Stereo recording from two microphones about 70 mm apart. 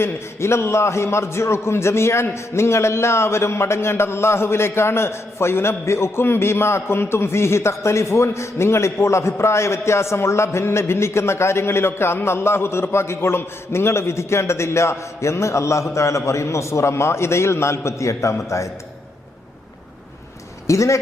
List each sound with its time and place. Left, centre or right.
0.0 s a man's voice: left
20.7 s speech: left